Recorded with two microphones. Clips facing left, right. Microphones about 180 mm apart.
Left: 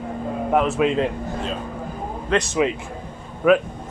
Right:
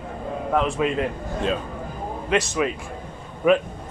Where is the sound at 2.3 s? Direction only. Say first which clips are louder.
Left 2 dB; 10° right (ahead or behind).